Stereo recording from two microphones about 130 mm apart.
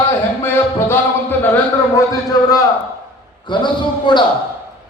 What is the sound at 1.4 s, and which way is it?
Speech, 15° left (ahead or behind).